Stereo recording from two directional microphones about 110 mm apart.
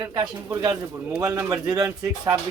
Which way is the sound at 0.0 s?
35° right (ahead or behind).